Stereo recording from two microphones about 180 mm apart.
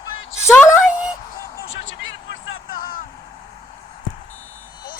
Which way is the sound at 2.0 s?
90° left.